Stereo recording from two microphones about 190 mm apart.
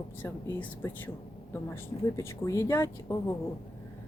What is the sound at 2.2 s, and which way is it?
Speech, 15° left (ahead or behind).